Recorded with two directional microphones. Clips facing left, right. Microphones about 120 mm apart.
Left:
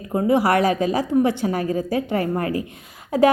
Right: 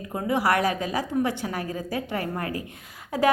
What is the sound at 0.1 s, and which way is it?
A woman's voice, 25° left (ahead or behind).